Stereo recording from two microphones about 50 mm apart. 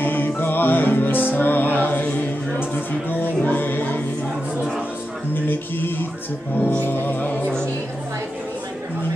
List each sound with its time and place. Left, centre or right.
0.0 s music: left
5.3 s speech: left